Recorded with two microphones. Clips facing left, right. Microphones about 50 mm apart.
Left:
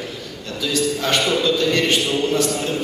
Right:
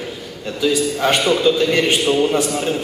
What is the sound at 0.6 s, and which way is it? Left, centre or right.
A man's voice, centre.